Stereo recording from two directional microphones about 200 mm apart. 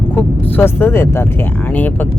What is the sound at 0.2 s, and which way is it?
Speech, 10° left (ahead or behind).